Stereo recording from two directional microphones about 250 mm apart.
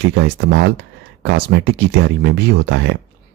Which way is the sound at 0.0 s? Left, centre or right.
Right.